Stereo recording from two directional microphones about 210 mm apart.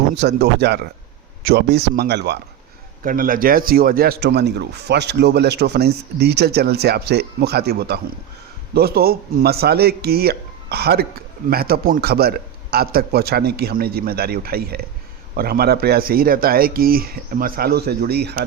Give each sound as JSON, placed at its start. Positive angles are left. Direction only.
{"t": 0.2, "sound": "speech", "side_deg": -50}
{"t": 3.0, "sound": "speech", "side_deg": -40}